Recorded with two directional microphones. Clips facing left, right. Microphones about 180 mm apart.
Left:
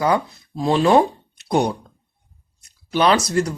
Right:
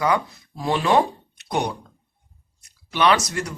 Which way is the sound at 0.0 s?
30° left (ahead or behind).